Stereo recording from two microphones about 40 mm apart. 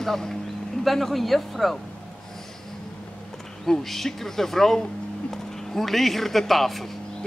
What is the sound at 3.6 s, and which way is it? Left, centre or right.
Speech, centre.